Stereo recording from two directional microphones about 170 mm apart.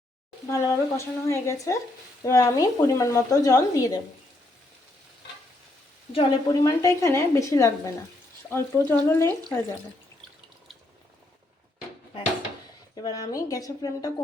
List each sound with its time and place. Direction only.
0.5 s speech: 15° left (ahead or behind)
6.1 s speech: 20° left (ahead or behind)
13.0 s speech: 20° left (ahead or behind)